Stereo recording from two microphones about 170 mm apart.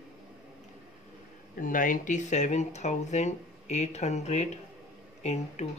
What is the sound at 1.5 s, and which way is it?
Speech, 55° left (ahead or behind).